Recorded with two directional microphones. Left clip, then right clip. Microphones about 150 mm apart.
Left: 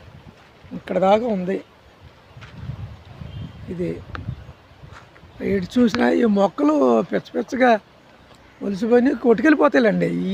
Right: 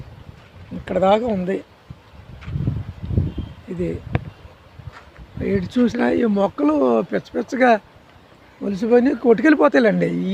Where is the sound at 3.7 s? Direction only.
5° right (ahead or behind).